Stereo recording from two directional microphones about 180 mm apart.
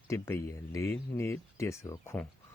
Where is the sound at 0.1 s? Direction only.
15° left (ahead or behind).